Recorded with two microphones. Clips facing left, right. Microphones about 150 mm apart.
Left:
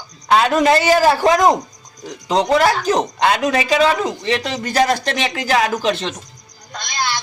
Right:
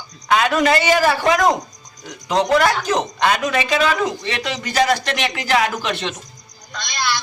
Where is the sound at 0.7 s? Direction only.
35° left (ahead or behind).